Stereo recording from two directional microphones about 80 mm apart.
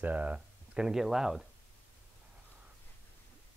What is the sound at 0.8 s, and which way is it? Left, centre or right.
Speech, centre.